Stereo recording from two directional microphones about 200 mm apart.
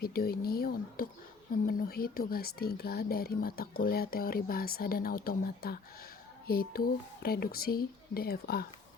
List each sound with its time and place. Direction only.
0.0 s speech: 50° left (ahead or behind)